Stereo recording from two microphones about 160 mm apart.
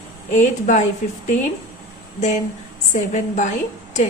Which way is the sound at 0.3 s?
50° left (ahead or behind).